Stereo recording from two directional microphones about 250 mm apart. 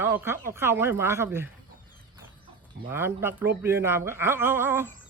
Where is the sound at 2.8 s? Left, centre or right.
Centre.